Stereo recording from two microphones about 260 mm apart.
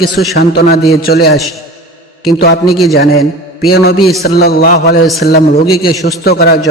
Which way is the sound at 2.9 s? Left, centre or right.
Left.